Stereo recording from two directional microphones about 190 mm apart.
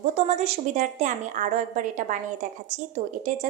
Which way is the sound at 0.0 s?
35° right (ahead or behind).